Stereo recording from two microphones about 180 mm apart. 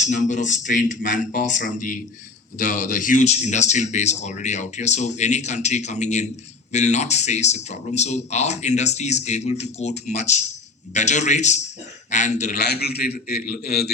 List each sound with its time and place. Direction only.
0.0 s a man's voice: 45° left (ahead or behind)
12.5 s a man's voice: 65° left (ahead or behind)